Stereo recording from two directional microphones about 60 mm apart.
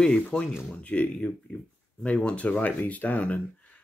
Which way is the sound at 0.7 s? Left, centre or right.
Left.